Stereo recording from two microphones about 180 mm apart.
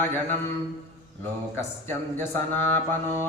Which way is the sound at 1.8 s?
10° left (ahead or behind).